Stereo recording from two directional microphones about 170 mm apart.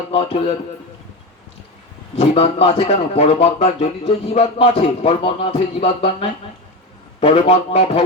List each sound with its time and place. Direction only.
0.1 s a man's voice: 35° left (ahead or behind)
2.1 s a man's voice: 35° left (ahead or behind)